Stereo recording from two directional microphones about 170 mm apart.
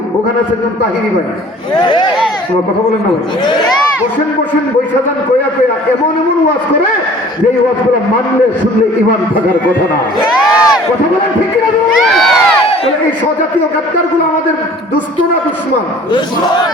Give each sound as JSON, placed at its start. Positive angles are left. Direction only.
{"t": 1.8, "sound": "speech", "side_deg": 25}
{"t": 10.3, "sound": "a sound", "side_deg": -5}
{"t": 11.9, "sound": "crowd", "side_deg": 0}